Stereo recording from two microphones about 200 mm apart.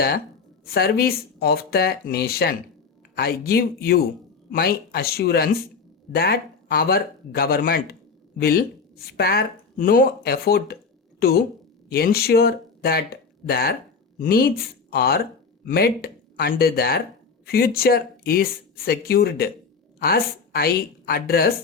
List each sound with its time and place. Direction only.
0.6 s speech: 50° left (ahead or behind)
11.9 s a woman's voice: 50° left (ahead or behind)